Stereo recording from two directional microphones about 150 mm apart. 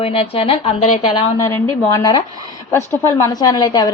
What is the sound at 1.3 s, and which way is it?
A woman's voice, 20° left (ahead or behind).